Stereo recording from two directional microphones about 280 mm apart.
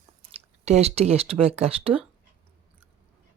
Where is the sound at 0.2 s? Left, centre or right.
Right.